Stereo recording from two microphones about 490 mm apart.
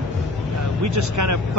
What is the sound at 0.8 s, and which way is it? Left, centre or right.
Speech, right.